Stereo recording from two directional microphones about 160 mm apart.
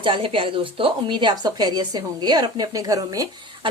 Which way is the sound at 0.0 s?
35° right (ahead or behind).